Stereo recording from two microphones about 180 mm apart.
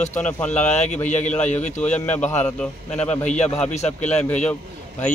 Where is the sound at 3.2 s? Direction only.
40° left (ahead or behind).